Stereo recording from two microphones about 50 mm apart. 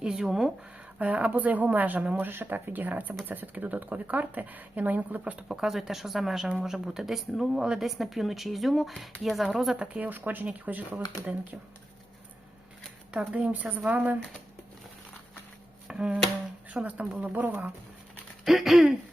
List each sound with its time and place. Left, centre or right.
0.0 s speech: centre
0.9 s speech: right
5.5 s speech: centre
9.7 s speech: right
10.1 s speech: right
13.1 s speech: right
15.9 s a sound: centre
16.6 s speech: right
18.4 s speech: centre